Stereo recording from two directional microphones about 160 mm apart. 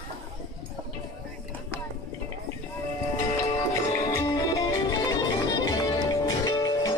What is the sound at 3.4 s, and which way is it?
Music, 20° left (ahead or behind).